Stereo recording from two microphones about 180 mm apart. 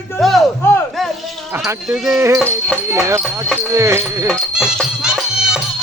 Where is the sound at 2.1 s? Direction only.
15° right (ahead or behind).